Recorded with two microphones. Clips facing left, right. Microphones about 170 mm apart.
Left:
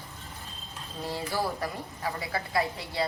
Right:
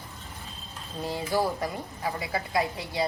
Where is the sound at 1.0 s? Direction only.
20° right (ahead or behind).